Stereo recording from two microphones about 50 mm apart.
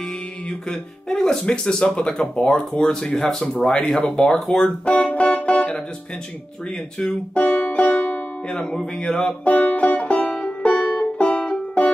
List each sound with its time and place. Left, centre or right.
0.5 s speech: centre
4.8 s music: left
7.0 s music: left
8.7 s speech: centre
9.4 s music: left